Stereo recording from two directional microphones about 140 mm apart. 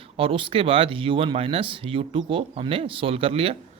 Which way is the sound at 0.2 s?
40° right (ahead or behind).